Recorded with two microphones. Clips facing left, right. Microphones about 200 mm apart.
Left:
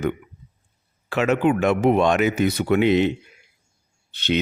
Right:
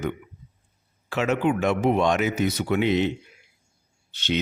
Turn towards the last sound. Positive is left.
turn(degrees=60)  # may be behind; listen again after turning